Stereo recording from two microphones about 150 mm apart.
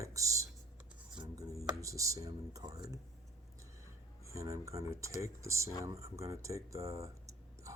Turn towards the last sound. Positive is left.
turn(degrees=-20)  # may be behind; listen again after turning